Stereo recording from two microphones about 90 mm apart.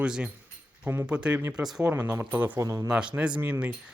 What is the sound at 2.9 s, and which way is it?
Speech, 10° right (ahead or behind).